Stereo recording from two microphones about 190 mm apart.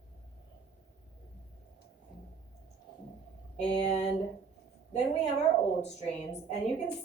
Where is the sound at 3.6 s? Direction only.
35° left (ahead or behind).